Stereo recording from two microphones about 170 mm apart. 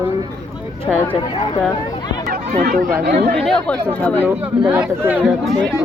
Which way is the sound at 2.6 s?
60° right (ahead or behind).